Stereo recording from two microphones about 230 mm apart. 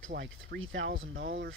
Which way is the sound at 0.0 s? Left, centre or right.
Right.